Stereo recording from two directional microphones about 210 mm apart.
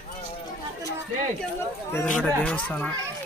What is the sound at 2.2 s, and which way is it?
Speech, 5° left (ahead or behind).